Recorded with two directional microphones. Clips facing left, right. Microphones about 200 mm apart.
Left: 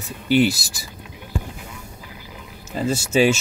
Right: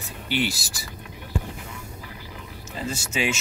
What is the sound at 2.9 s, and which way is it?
Speech, 35° left (ahead or behind).